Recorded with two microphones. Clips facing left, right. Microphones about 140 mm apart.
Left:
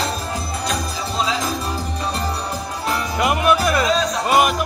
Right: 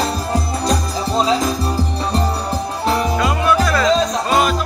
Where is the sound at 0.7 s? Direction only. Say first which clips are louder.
Right 8 dB; 35° right (ahead or behind).